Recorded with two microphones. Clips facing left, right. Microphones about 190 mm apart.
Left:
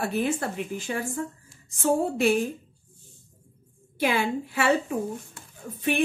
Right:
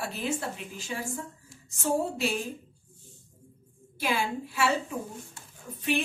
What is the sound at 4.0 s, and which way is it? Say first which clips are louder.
Speech: left 5 dB; 60° left (ahead or behind).